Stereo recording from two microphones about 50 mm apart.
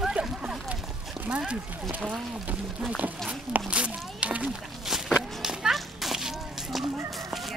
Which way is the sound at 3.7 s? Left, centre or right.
Right.